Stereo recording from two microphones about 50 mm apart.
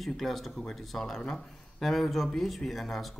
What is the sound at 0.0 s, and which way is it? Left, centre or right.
Speech, centre.